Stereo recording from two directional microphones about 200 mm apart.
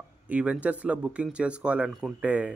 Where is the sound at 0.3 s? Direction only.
5° right (ahead or behind).